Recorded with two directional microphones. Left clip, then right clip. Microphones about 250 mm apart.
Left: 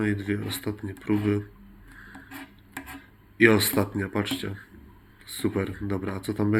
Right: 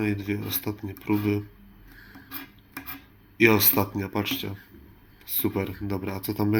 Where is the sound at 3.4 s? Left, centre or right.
Centre.